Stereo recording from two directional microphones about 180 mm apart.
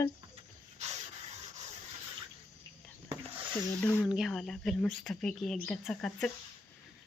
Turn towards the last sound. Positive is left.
turn(degrees=5)  # may be behind; listen again after turning